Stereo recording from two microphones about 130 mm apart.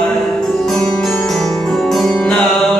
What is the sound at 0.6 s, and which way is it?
Music, 5° left (ahead or behind).